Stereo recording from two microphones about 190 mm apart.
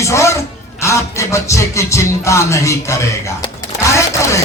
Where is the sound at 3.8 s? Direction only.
15° left (ahead or behind).